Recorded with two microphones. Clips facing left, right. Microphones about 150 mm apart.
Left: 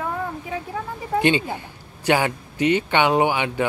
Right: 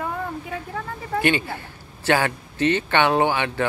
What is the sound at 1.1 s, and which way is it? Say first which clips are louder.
Speech: left 2 dB; 20° left (ahead or behind).